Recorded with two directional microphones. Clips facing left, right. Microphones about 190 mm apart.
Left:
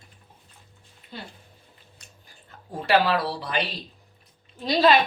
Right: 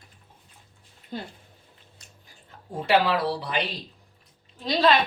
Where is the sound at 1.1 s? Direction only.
45° right (ahead or behind).